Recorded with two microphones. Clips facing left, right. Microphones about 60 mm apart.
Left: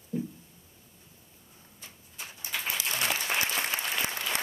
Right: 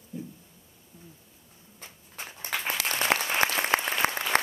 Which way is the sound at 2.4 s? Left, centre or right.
Right.